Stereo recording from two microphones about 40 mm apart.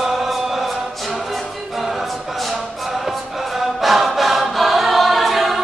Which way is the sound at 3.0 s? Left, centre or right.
Centre.